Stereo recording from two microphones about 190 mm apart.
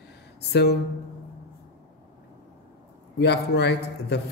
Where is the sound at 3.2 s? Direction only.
60° left (ahead or behind).